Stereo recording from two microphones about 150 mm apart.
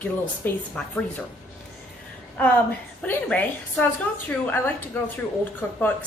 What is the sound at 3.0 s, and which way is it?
Speech, 10° left (ahead or behind).